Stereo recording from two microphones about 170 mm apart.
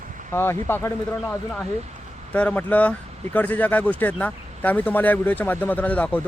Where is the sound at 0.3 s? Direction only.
15° left (ahead or behind).